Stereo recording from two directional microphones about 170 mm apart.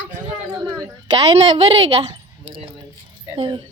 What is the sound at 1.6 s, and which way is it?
Speech, 35° right (ahead or behind).